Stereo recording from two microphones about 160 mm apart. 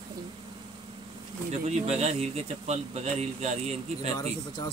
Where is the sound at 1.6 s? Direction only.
45° right (ahead or behind).